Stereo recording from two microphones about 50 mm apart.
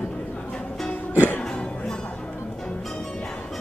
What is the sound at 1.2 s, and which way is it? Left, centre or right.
Music, left.